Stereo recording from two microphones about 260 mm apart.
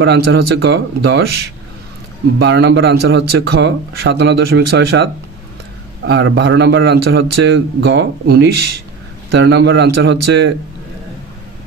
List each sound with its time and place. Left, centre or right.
0.0 s speech: right
2.3 s speech: right